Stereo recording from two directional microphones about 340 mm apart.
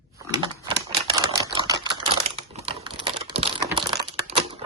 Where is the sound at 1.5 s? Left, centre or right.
Centre.